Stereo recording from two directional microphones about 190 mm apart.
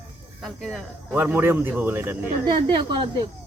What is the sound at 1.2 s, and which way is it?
Speech, 10° right (ahead or behind).